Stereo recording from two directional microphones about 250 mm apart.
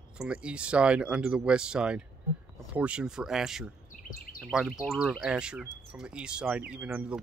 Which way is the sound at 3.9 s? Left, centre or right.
Left.